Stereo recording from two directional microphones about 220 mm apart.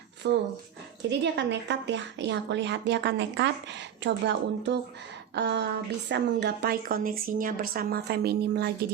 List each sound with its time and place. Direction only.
0.2 s a woman's voice: 50° right (ahead or behind)